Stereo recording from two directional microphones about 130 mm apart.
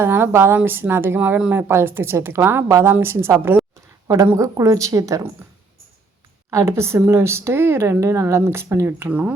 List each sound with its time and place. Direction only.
0.0 s a woman's voice: 15° right (ahead or behind)
6.5 s a woman's voice: 20° right (ahead or behind)